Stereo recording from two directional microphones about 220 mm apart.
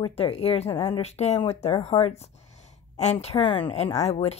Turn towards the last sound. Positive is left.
turn(degrees=30)  # may be behind; listen again after turning